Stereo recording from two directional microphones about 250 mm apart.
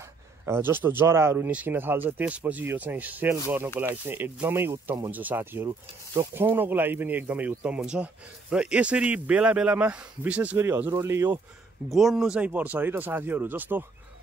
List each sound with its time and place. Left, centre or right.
0.5 s speech: centre